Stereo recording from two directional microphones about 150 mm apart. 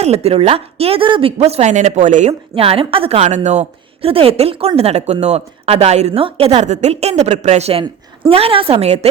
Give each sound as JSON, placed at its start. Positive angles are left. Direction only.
{"t": 0.0, "sound": "a woman's voice", "side_deg": -45}
{"t": 2.6, "sound": "a woman's voice", "side_deg": -40}